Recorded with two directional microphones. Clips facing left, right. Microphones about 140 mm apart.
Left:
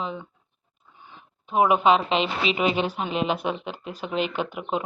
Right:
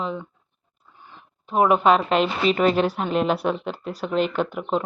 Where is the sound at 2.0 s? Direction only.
50° right (ahead or behind).